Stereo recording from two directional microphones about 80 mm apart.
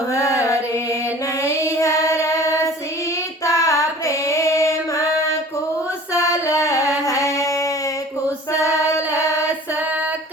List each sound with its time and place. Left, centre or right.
0.1 s music: left
1.5 s child singing: left
3.4 s female singing: left
6.1 s music: left